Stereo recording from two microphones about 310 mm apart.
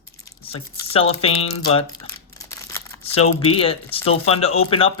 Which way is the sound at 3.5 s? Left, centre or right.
Centre.